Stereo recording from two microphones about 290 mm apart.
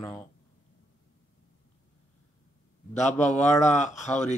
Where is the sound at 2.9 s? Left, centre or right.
Left.